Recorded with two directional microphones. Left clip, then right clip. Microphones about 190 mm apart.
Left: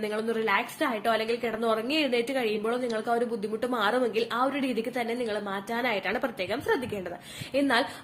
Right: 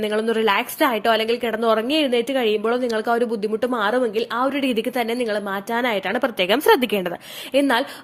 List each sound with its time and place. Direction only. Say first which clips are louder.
0.0 s a woman's voice: right 9 dB; 40° right (ahead or behind)
7.5 s speech: right 7 dB; 45° right (ahead or behind)